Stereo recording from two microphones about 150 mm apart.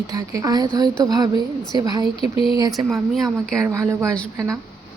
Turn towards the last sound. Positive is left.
turn(degrees=-20)  # may be behind; listen again after turning